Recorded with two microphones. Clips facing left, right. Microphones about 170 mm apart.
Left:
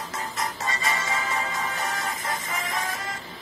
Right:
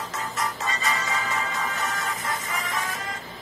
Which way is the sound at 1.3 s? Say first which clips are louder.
Even; 35° left (ahead or behind).